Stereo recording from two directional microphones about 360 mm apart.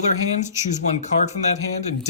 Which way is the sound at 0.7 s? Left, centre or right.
Centre.